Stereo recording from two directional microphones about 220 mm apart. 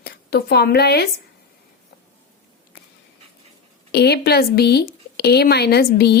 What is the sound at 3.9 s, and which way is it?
A woman's voice, 45° left (ahead or behind).